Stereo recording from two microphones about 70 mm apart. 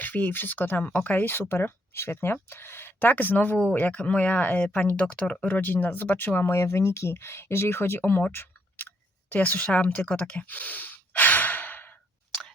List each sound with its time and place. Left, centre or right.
0.0 s speech: left
9.3 s speech: left
10.1 s sigh: left